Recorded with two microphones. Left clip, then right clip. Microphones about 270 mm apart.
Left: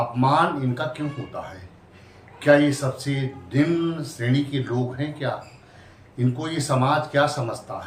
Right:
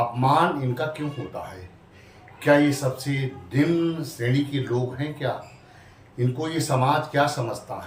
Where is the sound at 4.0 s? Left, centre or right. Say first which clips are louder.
Even; centre.